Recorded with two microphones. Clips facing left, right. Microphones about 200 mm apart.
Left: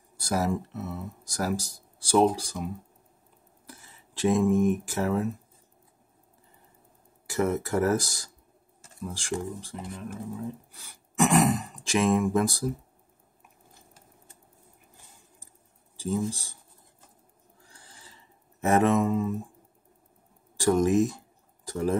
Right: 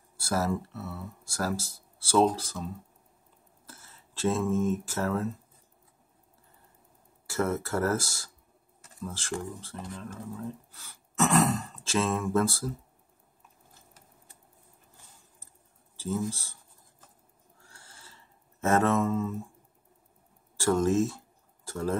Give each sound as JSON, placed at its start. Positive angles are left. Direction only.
{"t": 0.2, "sound": "speech", "side_deg": 15}
{"t": 7.2, "sound": "speech", "side_deg": 15}
{"t": 16.0, "sound": "speech", "side_deg": 15}
{"t": 17.6, "sound": "a sound", "side_deg": 15}
{"t": 20.5, "sound": "speech", "side_deg": 15}